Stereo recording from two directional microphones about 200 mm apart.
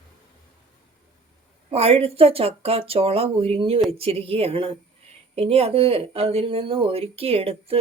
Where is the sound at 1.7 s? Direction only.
30° right (ahead or behind).